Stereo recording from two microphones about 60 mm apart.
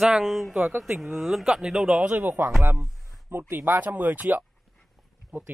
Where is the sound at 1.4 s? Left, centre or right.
Centre.